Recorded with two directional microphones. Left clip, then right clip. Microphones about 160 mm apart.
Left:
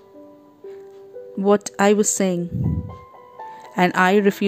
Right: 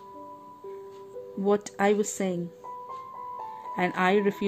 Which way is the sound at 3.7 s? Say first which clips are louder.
Left 8 dB; 30° left (ahead or behind).